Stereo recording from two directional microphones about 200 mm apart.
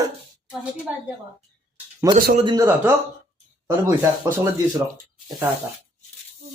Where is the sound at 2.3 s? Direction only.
20° right (ahead or behind).